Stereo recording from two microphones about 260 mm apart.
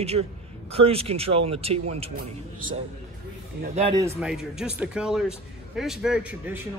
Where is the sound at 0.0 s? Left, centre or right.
Right.